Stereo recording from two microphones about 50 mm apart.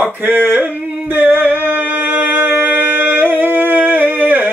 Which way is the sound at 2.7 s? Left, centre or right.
Right.